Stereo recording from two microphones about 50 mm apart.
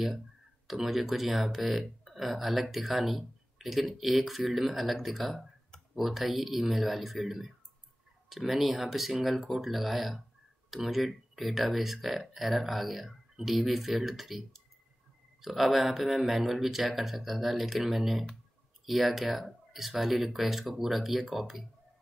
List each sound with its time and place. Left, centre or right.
0.7 s speech: centre
15.4 s speech: centre